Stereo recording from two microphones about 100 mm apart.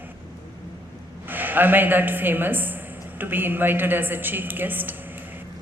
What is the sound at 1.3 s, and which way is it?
A woman's voice, 20° right (ahead or behind).